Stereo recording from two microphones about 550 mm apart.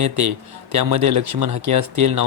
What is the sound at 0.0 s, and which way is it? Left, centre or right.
Speech, right.